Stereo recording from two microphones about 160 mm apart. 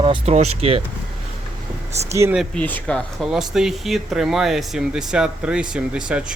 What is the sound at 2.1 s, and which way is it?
Speech, 15° right (ahead or behind).